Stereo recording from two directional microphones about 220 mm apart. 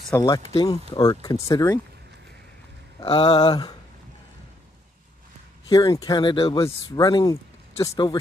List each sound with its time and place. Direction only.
0.1 s speech: 15° left (ahead or behind)
3.0 s speech: 25° left (ahead or behind)
5.7 s speech: 15° left (ahead or behind)